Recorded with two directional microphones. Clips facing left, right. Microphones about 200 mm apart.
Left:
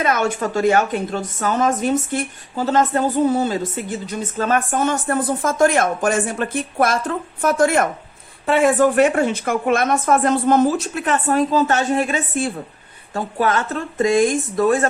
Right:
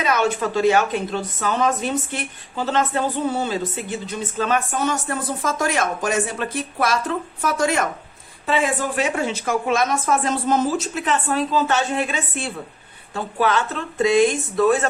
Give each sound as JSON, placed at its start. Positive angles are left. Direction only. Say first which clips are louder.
{"t": 0.0, "sound": "a woman's voice", "louder": "left 1 dB", "side_deg": 50}